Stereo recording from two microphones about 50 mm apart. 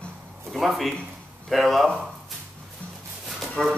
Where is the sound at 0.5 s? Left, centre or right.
Centre.